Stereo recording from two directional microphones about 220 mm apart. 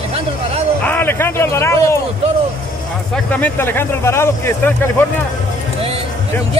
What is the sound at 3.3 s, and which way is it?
Speech, 5° left (ahead or behind).